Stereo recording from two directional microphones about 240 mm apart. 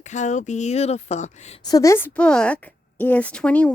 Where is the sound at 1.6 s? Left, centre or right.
Centre.